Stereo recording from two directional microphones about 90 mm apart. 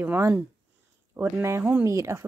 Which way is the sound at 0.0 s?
25° right (ahead or behind).